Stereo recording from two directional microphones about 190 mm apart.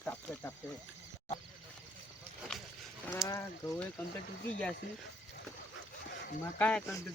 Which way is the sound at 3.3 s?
15° left (ahead or behind).